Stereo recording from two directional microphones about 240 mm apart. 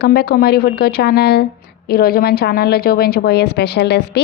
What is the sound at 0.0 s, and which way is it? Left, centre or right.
A woman's voice, left.